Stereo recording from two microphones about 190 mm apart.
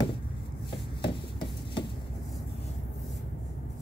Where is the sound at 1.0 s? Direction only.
25° left (ahead or behind).